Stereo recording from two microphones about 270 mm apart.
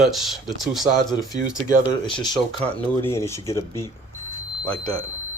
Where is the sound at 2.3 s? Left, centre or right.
Centre.